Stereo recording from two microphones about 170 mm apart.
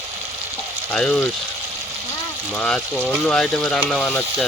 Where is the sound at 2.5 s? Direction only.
5° left (ahead or behind).